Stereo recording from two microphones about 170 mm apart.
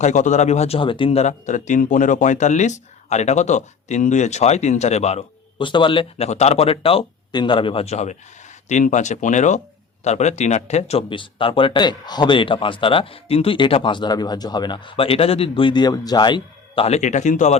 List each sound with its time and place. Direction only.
0.0 s speech: 45° left (ahead or behind)